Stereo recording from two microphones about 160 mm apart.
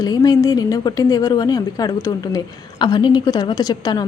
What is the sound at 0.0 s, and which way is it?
A woman's voice, 25° left (ahead or behind).